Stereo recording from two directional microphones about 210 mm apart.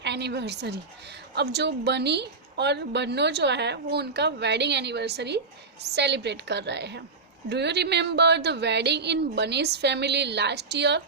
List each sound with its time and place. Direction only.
0.0 s a woman's voice: 55° right (ahead or behind)